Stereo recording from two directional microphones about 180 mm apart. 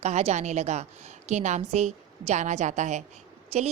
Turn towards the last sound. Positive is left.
turn(degrees=-35)  # may be behind; listen again after turning